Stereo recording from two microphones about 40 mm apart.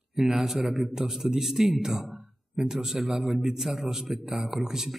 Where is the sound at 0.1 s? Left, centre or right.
Centre.